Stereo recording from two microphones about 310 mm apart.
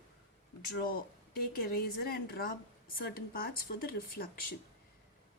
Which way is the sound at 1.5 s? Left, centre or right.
Left.